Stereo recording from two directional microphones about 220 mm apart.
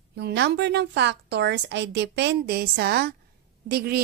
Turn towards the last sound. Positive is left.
turn(degrees=-45)  # may be behind; listen again after turning